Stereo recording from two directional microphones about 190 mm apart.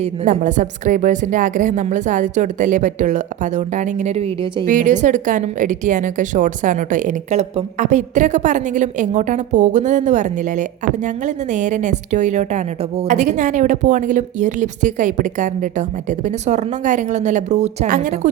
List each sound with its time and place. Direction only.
0.0 s a woman's voice: 35° right (ahead or behind)
4.6 s a woman's voice: 45° right (ahead or behind)